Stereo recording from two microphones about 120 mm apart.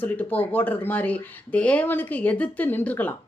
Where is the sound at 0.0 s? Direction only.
15° left (ahead or behind).